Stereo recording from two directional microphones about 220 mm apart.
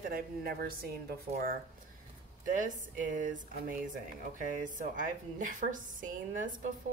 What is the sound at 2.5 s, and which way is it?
Speech, 35° right (ahead or behind).